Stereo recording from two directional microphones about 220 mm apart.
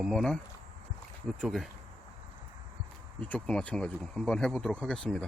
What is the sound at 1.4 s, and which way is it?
Speech, centre (ahead or behind).